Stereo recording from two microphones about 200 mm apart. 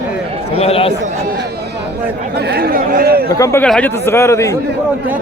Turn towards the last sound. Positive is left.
turn(degrees=15)  # may be behind; listen again after turning